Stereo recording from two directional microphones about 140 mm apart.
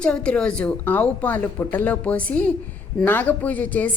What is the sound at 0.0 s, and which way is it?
A woman's voice, 5° left (ahead or behind).